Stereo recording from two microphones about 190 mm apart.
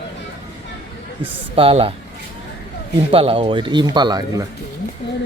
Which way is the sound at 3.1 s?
30° right (ahead or behind).